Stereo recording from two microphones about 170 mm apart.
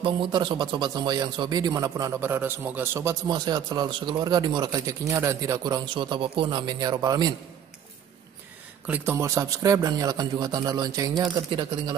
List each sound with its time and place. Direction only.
0.0 s a man's voice: 30° right (ahead or behind)
8.8 s a man's voice: 10° right (ahead or behind)